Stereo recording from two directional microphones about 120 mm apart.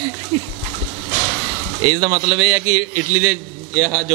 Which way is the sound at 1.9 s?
35° right (ahead or behind).